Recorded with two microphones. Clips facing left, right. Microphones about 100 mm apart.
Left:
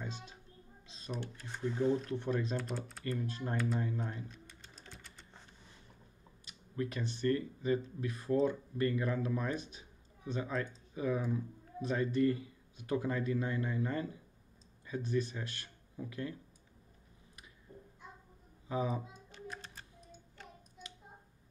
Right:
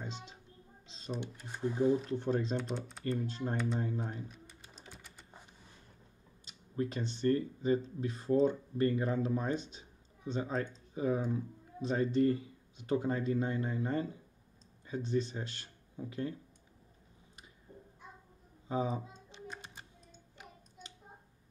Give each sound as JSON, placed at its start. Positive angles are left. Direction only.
{"t": 0.0, "sound": "music", "side_deg": -25}
{"t": 0.8, "sound": "typing", "side_deg": -30}
{"t": 1.3, "sound": "speech", "side_deg": -15}
{"t": 2.0, "sound": "speech", "side_deg": -30}
{"t": 2.5, "sound": "speech", "side_deg": 0}
{"t": 3.0, "sound": "speech", "side_deg": -30}
{"t": 3.5, "sound": "speech", "side_deg": 5}
{"t": 4.0, "sound": "a sound", "side_deg": -10}
{"t": 5.0, "sound": "typing", "side_deg": -10}
{"t": 6.4, "sound": "speech", "side_deg": -30}
{"t": 18.7, "sound": "speech", "side_deg": -30}
{"t": 19.3, "sound": "a sound", "side_deg": -25}
{"t": 19.6, "sound": "music", "side_deg": -15}